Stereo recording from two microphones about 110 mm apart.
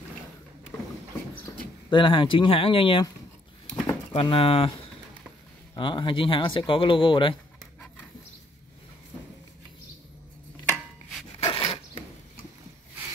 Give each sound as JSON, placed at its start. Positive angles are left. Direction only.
{"t": 1.9, "sound": "speech", "side_deg": 50}
{"t": 4.1, "sound": "speech", "side_deg": 55}
{"t": 5.8, "sound": "speech", "side_deg": 50}
{"t": 11.4, "sound": "a sound", "side_deg": 55}